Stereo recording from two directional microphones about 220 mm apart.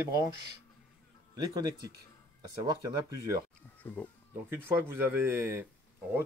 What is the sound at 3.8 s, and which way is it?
Speech, 5° left (ahead or behind).